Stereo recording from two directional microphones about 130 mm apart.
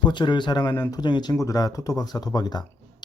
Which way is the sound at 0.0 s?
35° left (ahead or behind).